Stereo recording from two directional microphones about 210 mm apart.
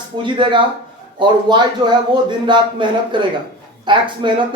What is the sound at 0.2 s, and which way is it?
Speech, 25° right (ahead or behind).